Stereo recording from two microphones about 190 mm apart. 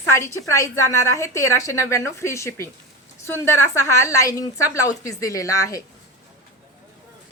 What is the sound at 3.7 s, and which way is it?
A woman's voice, 15° left (ahead or behind).